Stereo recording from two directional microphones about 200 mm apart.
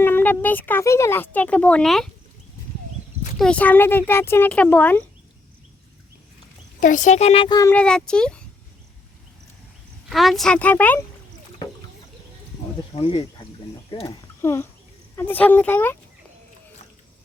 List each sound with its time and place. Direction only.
0.0 s speech: 10° left (ahead or behind)
3.3 s speech: 5° left (ahead or behind)
6.7 s speech: 40° left (ahead or behind); by 7.7 s 20° left (ahead or behind)
7.7 s speech: 5° left (ahead or behind)
10.1 s speech: centre (ahead or behind)
13.0 s speech: 25° left (ahead or behind); by 16.0 s 10° left (ahead or behind)